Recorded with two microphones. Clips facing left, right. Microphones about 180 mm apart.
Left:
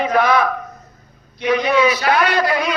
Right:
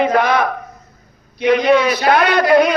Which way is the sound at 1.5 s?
60° right (ahead or behind).